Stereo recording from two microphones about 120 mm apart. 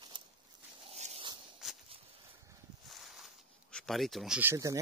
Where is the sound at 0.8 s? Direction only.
60° right (ahead or behind).